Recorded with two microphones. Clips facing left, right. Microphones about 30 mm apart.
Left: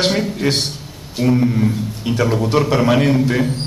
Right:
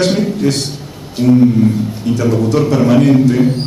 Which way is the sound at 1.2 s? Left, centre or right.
Centre.